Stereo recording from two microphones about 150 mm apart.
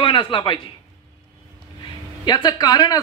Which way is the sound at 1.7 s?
30° left (ahead or behind).